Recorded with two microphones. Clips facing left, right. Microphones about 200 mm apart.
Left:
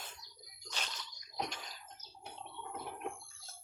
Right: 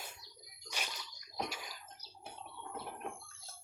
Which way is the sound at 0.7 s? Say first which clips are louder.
Right 1 dB; 10° right (ahead or behind).